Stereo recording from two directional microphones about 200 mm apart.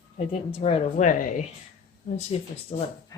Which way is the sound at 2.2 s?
30° left (ahead or behind).